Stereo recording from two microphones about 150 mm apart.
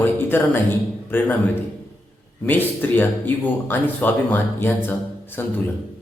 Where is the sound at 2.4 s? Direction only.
10° left (ahead or behind).